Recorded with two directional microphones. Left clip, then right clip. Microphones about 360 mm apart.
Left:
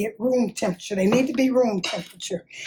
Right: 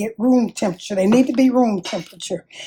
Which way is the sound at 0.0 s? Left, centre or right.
Right.